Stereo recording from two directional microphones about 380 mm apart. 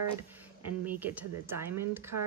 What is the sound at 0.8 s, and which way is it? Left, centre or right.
Speech, centre.